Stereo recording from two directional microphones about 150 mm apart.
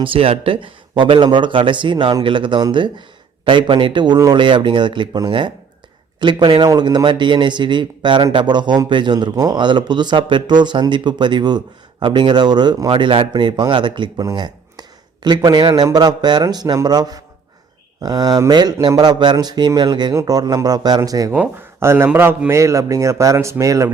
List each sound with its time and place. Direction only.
0.0 s a man's voice: 35° right (ahead or behind); by 23.9 s 20° right (ahead or behind)